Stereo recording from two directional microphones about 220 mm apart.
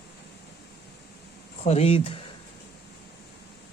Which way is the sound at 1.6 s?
30° left (ahead or behind).